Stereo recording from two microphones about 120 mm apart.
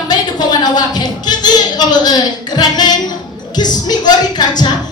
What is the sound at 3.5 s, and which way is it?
Music, 35° left (ahead or behind).